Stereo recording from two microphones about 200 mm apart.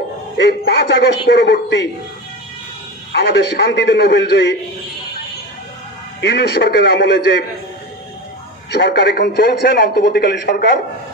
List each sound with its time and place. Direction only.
0.5 s a man's voice: 55° left (ahead or behind)
3.1 s a man's voice: 60° left (ahead or behind)
6.2 s a man's voice: 55° left (ahead or behind)
8.7 s a man's voice: 55° left (ahead or behind)